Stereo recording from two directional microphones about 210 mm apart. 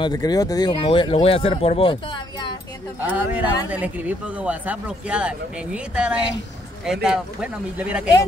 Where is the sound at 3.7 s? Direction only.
5° right (ahead or behind).